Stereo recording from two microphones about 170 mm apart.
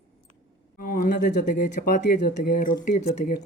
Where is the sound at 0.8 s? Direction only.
55° left (ahead or behind).